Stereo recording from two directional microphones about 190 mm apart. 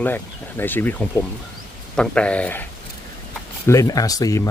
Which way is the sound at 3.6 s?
15° left (ahead or behind).